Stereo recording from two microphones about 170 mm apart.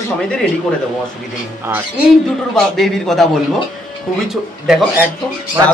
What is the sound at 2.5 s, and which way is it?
Speech, centre (ahead or behind).